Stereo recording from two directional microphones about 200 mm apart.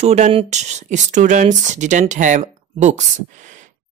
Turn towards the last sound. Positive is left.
turn(degrees=-35)  # may be behind; listen again after turning